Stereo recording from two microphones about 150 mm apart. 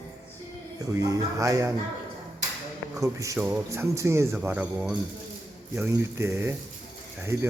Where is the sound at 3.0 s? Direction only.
20° right (ahead or behind).